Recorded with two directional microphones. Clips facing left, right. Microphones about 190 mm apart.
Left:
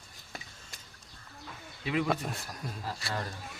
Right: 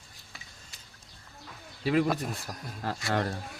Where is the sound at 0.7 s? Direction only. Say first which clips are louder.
Left 3 dB; 45° left (ahead or behind).